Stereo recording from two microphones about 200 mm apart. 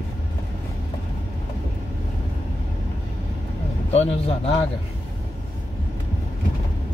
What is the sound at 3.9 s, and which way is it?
Speech, 30° left (ahead or behind).